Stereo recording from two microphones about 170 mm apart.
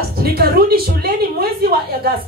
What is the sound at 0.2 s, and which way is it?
A woman's voice, 65° right (ahead or behind).